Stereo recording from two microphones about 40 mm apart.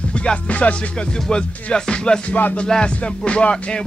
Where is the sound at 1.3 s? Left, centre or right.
Left.